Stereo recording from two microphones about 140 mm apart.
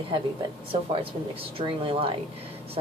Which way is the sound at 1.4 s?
40° right (ahead or behind).